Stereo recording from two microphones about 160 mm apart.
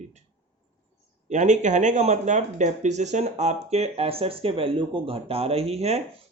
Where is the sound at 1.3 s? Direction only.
50° right (ahead or behind).